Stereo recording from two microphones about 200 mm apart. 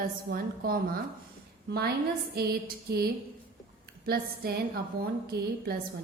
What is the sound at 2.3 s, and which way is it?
A woman's voice, 50° right (ahead or behind).